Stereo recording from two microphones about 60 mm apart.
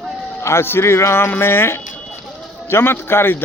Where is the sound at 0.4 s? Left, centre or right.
Left.